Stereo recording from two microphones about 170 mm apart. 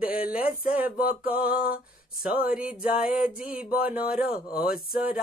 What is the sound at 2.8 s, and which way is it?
Speech, 55° left (ahead or behind).